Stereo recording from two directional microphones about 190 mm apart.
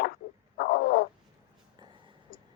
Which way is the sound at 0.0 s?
50° left (ahead or behind).